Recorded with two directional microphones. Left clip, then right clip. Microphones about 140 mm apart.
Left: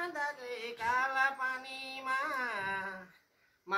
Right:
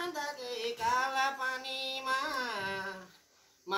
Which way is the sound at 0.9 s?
10° left (ahead or behind).